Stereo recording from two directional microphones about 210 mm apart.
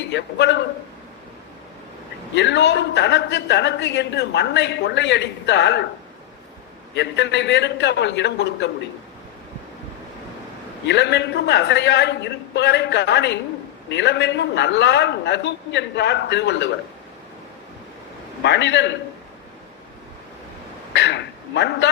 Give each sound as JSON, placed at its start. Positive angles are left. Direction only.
{"t": 0.0, "sound": "a man's voice", "side_deg": 55}
{"t": 2.3, "sound": "a woman's voice", "side_deg": 55}
{"t": 6.9, "sound": "a woman's voice", "side_deg": 55}
{"t": 10.8, "sound": "a woman's voice", "side_deg": 55}
{"t": 18.4, "sound": "a woman's voice", "side_deg": 55}
{"t": 20.9, "sound": "a man's voice", "side_deg": 55}